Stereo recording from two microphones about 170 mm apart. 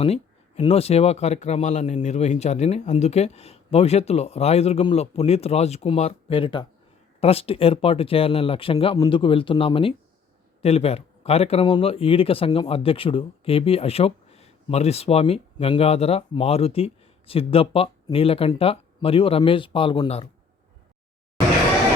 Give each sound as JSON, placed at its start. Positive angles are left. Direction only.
{"t": 0.0, "sound": "speech", "side_deg": 35}